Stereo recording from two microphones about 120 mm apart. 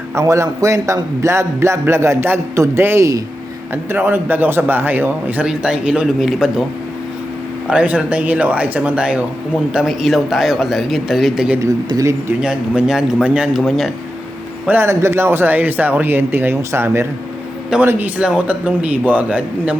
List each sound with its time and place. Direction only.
0.1 s a man's voice: 25° right (ahead or behind); by 6.5 s 5° right (ahead or behind)
7.7 s a man's voice: 10° right (ahead or behind)
11.9 s a man's voice: 30° right (ahead or behind)
12.4 s a man's voice: 5° right (ahead or behind)
14.7 s a man's voice: 20° right (ahead or behind)